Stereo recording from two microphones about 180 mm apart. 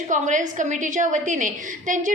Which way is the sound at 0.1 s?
45° right (ahead or behind).